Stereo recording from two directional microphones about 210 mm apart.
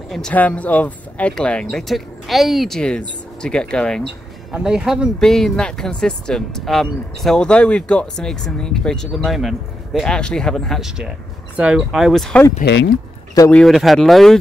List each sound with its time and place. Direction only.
0.1 s speech: 5° left (ahead or behind)
12.6 s speech: 50° left (ahead or behind)
13.3 s speech: 15° left (ahead or behind)
13.6 s speech: centre (ahead or behind)